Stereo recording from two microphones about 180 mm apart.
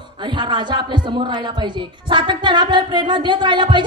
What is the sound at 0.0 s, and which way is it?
A woman's voice, 25° right (ahead or behind).